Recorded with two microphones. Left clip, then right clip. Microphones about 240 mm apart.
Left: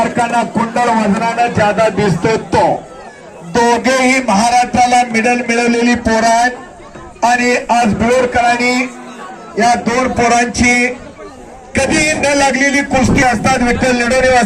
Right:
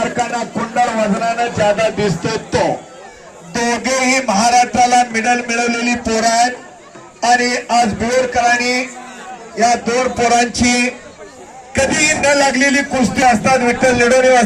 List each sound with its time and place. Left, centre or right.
0.2 s a man's voice: centre; by 14.4 s left